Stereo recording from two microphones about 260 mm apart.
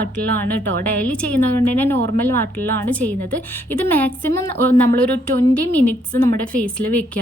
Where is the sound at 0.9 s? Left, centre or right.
Centre.